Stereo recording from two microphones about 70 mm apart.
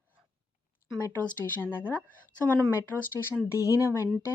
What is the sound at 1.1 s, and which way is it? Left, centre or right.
A woman's voice, left.